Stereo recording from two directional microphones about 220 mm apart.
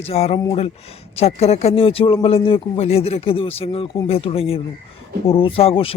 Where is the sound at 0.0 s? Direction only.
25° left (ahead or behind).